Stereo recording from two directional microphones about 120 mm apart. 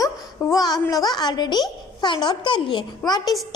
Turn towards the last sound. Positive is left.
turn(degrees=35)  # may be behind; listen again after turning